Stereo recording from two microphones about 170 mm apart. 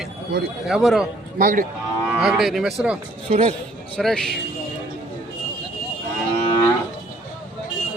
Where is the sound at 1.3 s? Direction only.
55° right (ahead or behind).